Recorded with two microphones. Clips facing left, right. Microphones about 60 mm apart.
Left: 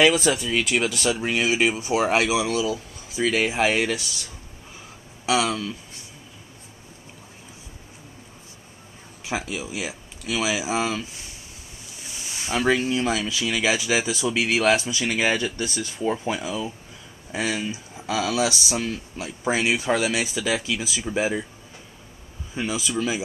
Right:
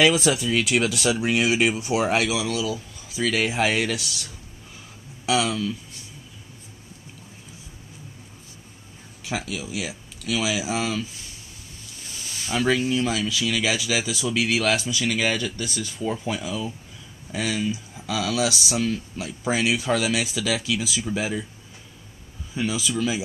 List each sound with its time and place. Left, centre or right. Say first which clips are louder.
0.1 s speech: even; centre
2.2 s speech: left 2 dB; centre
3.3 s speech: left 1 dB; centre
5.2 s speech: even; centre
9.2 s speech: left 1 dB; centre
12.1 s speech: left 1 dB; centre
18.5 s speech: right 2 dB; centre; by 21.5 s left
22.7 s speech: even; centre